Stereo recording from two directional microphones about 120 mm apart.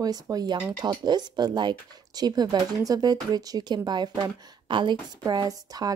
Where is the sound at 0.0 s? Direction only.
35° right (ahead or behind).